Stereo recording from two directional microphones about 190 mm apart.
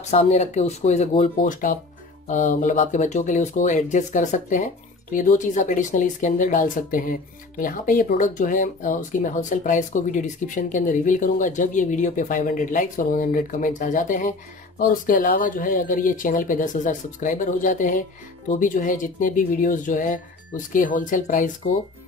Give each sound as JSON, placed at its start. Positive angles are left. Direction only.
{"t": 0.1, "sound": "speech", "side_deg": 35}
{"t": 1.4, "sound": "speech", "side_deg": 45}